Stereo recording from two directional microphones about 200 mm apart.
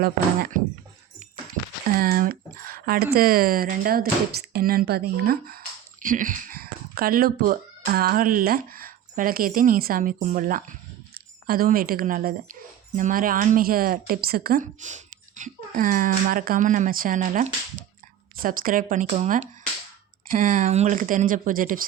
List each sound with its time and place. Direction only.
0.0 s a woman's voice: 45° right (ahead or behind)
2.0 s a woman's voice: 45° right (ahead or behind)